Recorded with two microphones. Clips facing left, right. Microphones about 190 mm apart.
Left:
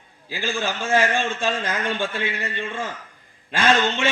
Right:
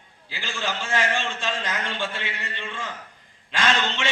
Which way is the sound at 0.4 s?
55° left (ahead or behind).